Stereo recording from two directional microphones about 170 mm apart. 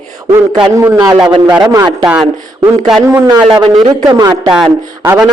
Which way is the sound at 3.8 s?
20° right (ahead or behind).